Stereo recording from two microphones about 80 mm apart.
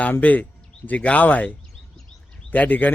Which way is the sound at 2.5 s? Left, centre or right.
Left.